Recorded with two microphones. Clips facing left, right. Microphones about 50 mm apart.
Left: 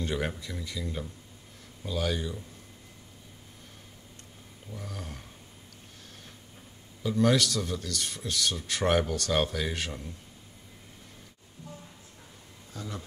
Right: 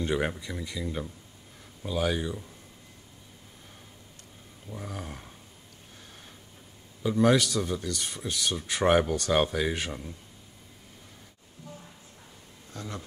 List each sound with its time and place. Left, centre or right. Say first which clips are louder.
0.0 s speech: right 3 dB; centre
4.6 s speech: right 3 dB; centre
7.0 s speech: right 2 dB; centre
12.7 s speech: right 1 dB; centre